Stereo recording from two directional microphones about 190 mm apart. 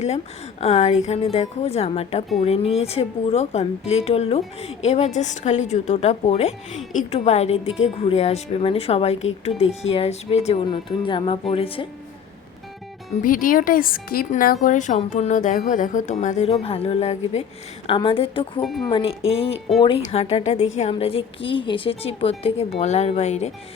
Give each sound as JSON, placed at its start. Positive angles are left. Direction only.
{"t": 0.6, "sound": "a woman's voice", "side_deg": 35}
{"t": 13.2, "sound": "a woman's voice", "side_deg": 45}
{"t": 18.6, "sound": "speech", "side_deg": 0}
{"t": 18.9, "sound": "a woman's voice", "side_deg": 30}